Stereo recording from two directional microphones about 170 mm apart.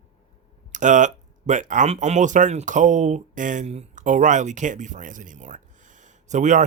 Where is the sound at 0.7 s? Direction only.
45° right (ahead or behind).